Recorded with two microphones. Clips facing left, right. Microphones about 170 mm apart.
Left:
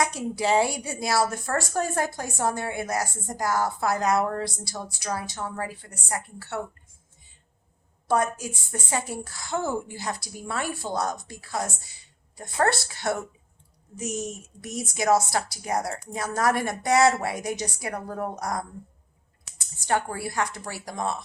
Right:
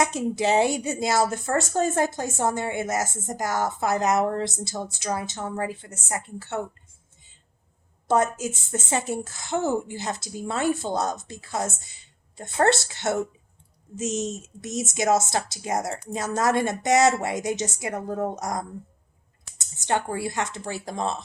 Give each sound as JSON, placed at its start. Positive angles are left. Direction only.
{"t": 0.3, "sound": "a woman's voice", "side_deg": -20}
{"t": 8.0, "sound": "a woman's voice", "side_deg": -25}